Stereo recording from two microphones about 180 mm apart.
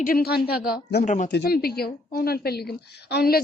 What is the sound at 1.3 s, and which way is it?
Speech, 60° left (ahead or behind).